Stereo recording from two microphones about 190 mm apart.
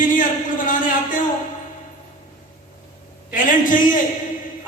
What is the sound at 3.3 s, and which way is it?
Speech, 45° left (ahead or behind).